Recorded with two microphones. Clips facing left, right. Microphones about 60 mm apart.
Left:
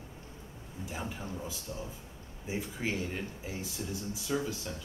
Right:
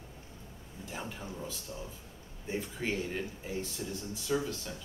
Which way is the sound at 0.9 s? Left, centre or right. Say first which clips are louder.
Left 1 dB; centre.